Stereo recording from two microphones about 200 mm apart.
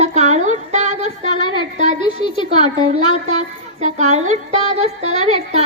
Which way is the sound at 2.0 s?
25° left (ahead or behind).